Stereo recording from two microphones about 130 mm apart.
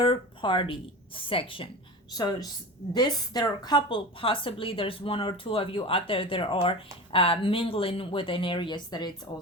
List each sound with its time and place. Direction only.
0.0 s a woman's voice: 40° left (ahead or behind)
2.1 s a woman's voice: 30° left (ahead or behind)